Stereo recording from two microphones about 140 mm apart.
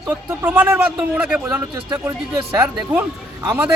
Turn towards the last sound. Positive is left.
turn(degrees=-15)  # may be behind; listen again after turning